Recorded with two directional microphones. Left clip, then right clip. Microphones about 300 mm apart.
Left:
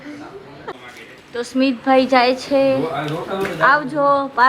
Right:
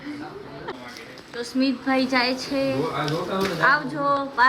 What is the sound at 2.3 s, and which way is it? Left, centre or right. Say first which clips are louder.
Speech: left 9 dB; centre.